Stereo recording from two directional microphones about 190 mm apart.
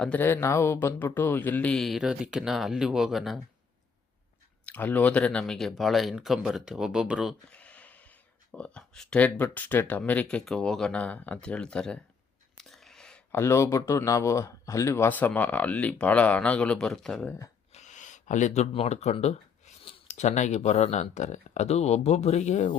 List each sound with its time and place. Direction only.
0.0 s speech: 10° left (ahead or behind)
4.6 s speech: 10° left (ahead or behind)
17.7 s speech: 40° left (ahead or behind)